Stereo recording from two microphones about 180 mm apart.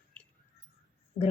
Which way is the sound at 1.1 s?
35° left (ahead or behind).